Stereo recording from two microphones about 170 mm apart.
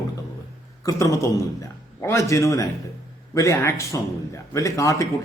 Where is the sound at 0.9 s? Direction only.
20° left (ahead or behind).